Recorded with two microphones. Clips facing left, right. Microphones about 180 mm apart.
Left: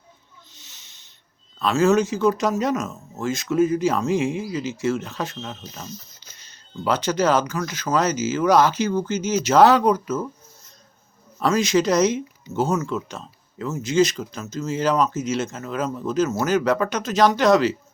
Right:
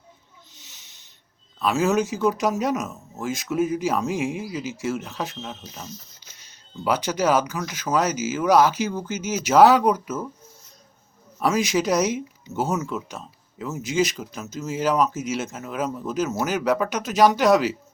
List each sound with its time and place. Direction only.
0.5 s snake: 15° right (ahead or behind)
1.5 s speech: 10° right (ahead or behind)
11.3 s speech: 5° right (ahead or behind)